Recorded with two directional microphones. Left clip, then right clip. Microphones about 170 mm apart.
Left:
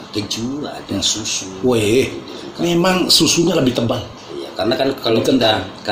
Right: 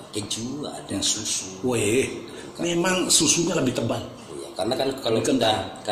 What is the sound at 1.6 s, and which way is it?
Speech, 20° left (ahead or behind).